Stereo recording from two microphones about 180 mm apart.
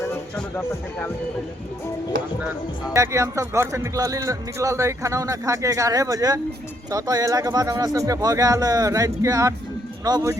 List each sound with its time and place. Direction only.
0.3 s speech: 10° left (ahead or behind)
2.9 s speech: 15° right (ahead or behind)